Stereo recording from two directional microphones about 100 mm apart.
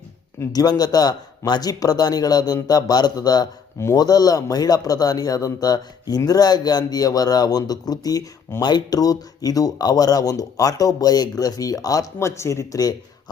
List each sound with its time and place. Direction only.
0.5 s speech: 40° left (ahead or behind)